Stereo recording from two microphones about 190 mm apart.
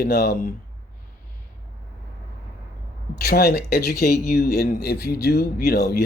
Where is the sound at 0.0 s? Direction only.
55° left (ahead or behind).